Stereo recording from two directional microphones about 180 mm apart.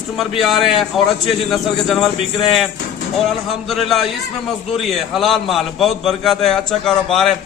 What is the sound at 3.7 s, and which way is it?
A man's voice, centre (ahead or behind).